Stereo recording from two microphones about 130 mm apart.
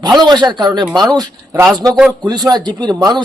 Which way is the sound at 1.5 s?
20° right (ahead or behind).